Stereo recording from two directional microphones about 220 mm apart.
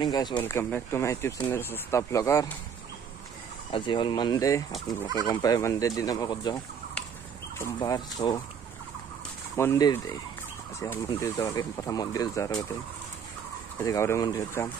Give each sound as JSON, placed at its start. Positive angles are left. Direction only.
{"t": 0.0, "sound": "speech", "side_deg": 20}
{"t": 3.7, "sound": "speech", "side_deg": 20}
{"t": 9.6, "sound": "speech", "side_deg": 15}
{"t": 11.1, "sound": "speech", "side_deg": 15}
{"t": 13.8, "sound": "speech", "side_deg": 15}